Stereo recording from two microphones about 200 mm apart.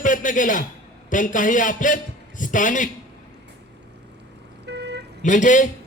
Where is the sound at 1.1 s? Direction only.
40° left (ahead or behind).